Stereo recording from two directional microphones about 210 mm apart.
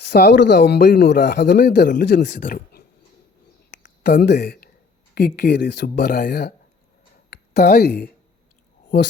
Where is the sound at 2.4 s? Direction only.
45° left (ahead or behind).